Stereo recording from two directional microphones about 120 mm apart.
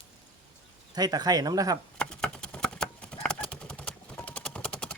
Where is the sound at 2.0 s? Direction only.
5° left (ahead or behind).